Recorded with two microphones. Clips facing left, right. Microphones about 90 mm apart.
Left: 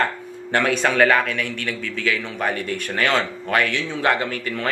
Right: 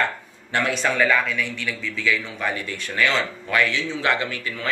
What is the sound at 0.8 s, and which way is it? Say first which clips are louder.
A man's voice: left 3 dB; 65° left (ahead or behind).